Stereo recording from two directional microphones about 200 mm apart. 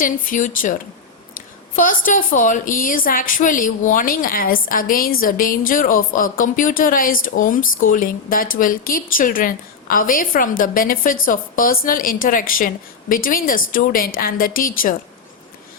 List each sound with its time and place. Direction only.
0.0 s a woman's voice: 40° left (ahead or behind)